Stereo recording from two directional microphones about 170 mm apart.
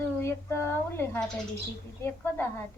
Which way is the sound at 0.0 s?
15° left (ahead or behind).